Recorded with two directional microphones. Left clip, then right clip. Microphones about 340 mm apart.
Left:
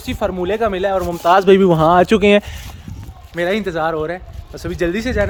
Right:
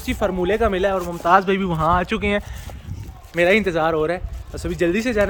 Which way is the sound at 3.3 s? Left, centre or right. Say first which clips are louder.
Right 2 dB; centre.